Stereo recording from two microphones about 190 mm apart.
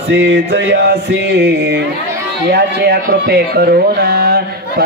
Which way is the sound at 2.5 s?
60° right (ahead or behind).